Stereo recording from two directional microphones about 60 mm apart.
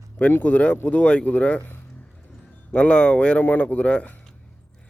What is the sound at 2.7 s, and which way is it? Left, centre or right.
Speech, left.